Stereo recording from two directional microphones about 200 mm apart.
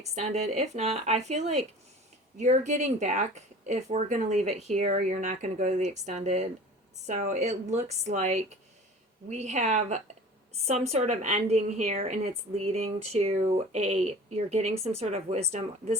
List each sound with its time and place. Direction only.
0.0 s speech: 35° right (ahead or behind)